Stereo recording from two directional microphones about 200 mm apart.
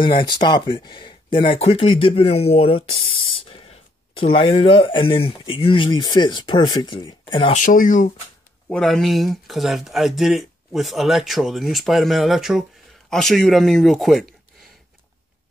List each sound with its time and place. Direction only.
0.0 s speech: 25° left (ahead or behind)
7.5 s speech: 40° left (ahead or behind)
8.6 s speech: 5° left (ahead or behind)